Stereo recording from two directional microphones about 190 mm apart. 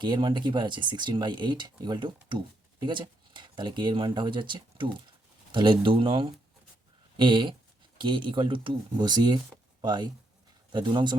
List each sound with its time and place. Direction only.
0.0 s speech: 25° right (ahead or behind)